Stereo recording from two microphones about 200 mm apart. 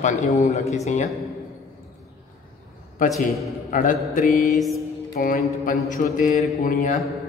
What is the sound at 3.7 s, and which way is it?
Speech, 40° left (ahead or behind).